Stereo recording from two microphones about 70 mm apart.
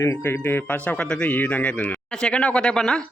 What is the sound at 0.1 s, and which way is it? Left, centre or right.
A man's voice, left.